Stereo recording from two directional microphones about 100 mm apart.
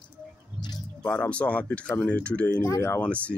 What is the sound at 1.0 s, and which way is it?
Speech, 10° left (ahead or behind).